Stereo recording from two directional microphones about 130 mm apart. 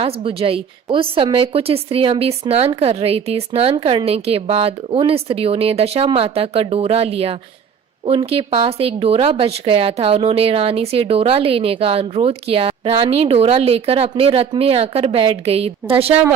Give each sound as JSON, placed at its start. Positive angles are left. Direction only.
{"t": 0.0, "sound": "a woman's voice", "side_deg": -45}